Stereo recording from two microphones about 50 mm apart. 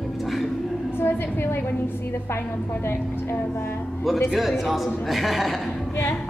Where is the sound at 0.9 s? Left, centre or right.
Left.